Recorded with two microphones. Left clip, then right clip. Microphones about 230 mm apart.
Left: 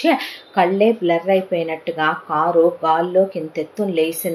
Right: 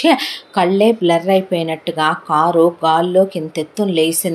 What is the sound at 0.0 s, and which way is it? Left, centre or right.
A woman's voice, right.